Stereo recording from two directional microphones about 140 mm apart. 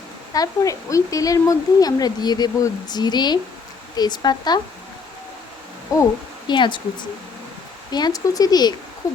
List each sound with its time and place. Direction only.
0.3 s a woman's voice: 25° left (ahead or behind)
5.9 s a woman's voice: 25° left (ahead or behind)
6.5 s speech: 35° left (ahead or behind)
7.9 s a woman's voice: 30° left (ahead or behind)
9.0 s a sound: 25° left (ahead or behind)